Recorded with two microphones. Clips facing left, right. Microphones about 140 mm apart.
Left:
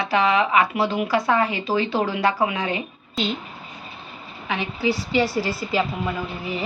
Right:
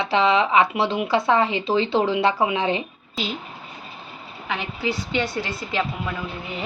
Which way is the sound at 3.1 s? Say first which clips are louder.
Left 3 dB; 5° right (ahead or behind).